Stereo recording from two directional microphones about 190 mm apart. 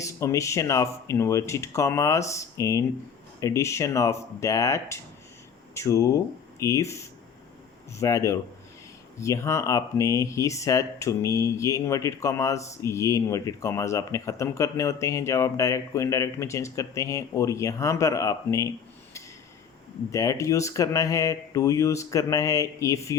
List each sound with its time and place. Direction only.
0.0 s speech: 15° left (ahead or behind)
20.1 s speech: 15° left (ahead or behind)